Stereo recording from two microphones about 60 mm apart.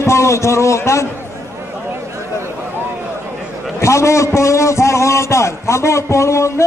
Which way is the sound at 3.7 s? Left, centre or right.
Left.